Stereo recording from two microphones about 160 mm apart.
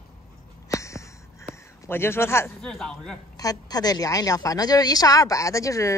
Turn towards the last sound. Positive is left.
turn(degrees=20)  # may be behind; listen again after turning